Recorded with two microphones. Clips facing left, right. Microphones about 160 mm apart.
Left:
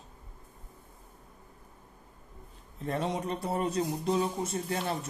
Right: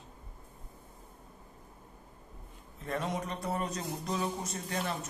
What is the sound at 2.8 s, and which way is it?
Speech, 30° left (ahead or behind).